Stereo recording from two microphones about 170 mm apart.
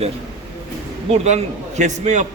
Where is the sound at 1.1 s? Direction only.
40° right (ahead or behind).